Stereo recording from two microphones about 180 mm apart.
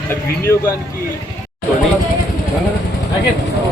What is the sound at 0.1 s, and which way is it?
Speech, 15° left (ahead or behind).